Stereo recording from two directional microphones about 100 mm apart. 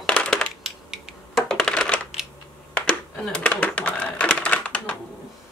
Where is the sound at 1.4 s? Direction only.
5° left (ahead or behind).